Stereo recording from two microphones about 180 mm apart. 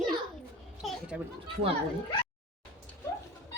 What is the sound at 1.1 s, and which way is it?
Speech, 5° right (ahead or behind).